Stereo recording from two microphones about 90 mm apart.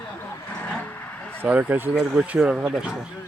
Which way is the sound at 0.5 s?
15° left (ahead or behind).